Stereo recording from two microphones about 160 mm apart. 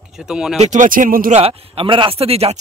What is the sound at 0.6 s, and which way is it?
Speech, 50° right (ahead or behind).